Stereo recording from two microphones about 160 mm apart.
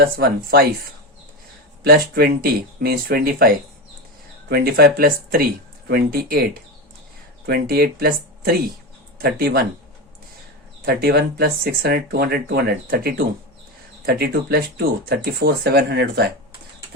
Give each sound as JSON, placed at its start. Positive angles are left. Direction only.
{"t": 0.0, "sound": "speech", "side_deg": -75}
{"t": 1.8, "sound": "speech", "side_deg": -85}
{"t": 10.8, "sound": "speech", "side_deg": -75}
{"t": 14.0, "sound": "speech", "side_deg": -80}